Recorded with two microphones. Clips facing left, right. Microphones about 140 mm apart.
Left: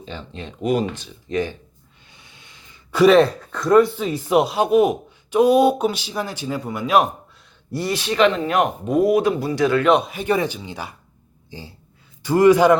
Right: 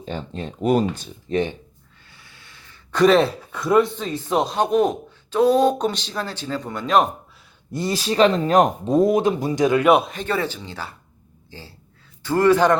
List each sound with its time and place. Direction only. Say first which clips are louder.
0.0 s speech: right 4 dB; 50° right (ahead or behind)
2.0 s a sound: even; 20° left (ahead or behind)
3.0 s speech: left 3 dB; centre (ahead or behind)
7.7 s speech: left 1 dB; 25° right (ahead or behind)
7.9 s speech: right 1 dB; 35° right (ahead or behind); by 10.1 s 10° right (ahead or behind)
10.1 s speech: left 3 dB; 10° left (ahead or behind)